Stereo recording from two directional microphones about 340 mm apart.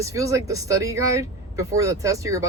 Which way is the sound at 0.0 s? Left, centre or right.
Centre.